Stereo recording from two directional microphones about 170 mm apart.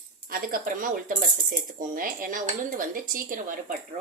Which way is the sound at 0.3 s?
55° right (ahead or behind).